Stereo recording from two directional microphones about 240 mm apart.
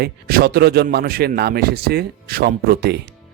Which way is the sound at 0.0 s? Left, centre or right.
Right.